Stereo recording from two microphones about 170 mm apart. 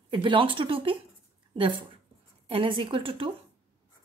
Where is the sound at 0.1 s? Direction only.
30° right (ahead or behind).